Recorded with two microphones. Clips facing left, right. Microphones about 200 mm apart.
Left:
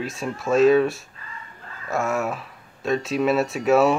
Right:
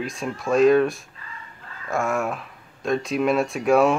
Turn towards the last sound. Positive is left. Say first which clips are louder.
# even
turn(degrees=0)  # may be behind; listen again after turning